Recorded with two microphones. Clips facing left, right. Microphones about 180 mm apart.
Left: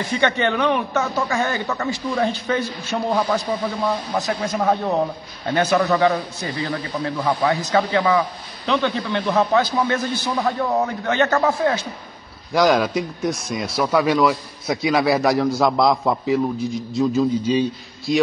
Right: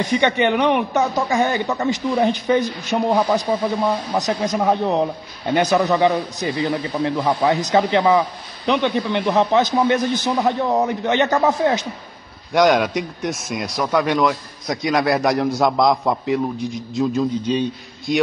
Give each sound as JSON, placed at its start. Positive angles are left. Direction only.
{"t": 0.0, "sound": "a man's voice", "side_deg": -15}
{"t": 12.5, "sound": "a man's voice", "side_deg": 0}